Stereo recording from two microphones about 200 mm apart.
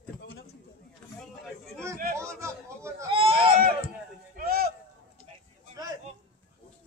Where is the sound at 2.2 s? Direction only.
15° right (ahead or behind).